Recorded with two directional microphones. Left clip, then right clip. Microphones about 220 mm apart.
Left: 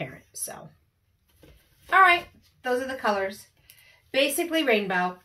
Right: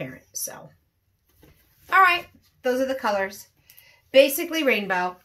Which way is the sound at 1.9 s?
50° right (ahead or behind).